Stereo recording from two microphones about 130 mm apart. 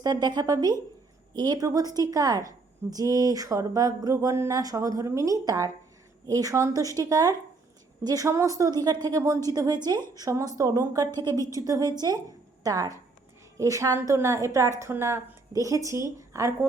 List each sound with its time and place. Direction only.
0.0 s a woman's voice: 30° right (ahead or behind)